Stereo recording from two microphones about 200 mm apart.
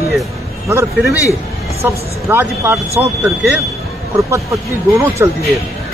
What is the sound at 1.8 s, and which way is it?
Speech, 10° right (ahead or behind).